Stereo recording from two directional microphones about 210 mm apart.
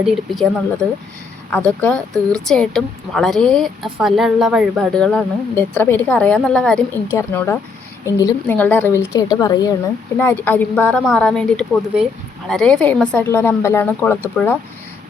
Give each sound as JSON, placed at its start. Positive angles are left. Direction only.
{"t": 0.0, "sound": "a woman's voice", "side_deg": 0}